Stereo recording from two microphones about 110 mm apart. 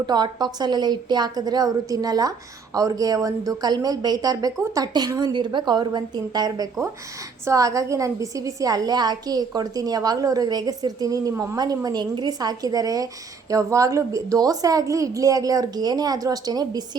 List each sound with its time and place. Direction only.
0.0 s a woman's voice: 40° right (ahead or behind)